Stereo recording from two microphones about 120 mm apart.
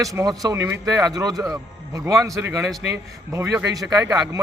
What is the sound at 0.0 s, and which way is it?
A man's voice, 25° right (ahead or behind).